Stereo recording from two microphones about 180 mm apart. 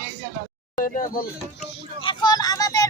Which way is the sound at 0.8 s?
50° left (ahead or behind).